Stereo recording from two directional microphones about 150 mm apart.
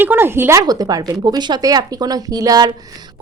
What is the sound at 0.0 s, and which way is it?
A woman's voice, 15° right (ahead or behind).